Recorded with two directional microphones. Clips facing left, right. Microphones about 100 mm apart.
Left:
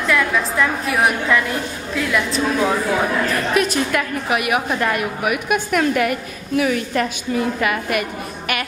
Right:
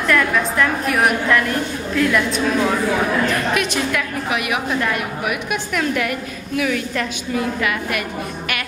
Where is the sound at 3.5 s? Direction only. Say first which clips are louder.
Left 2 dB; 40° left (ahead or behind).